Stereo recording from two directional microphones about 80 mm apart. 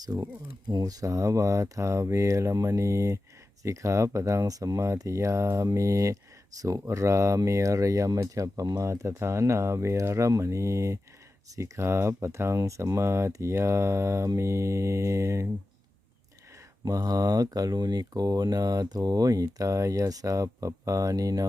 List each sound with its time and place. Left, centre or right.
0.0 s speech: right
16.8 s speech: right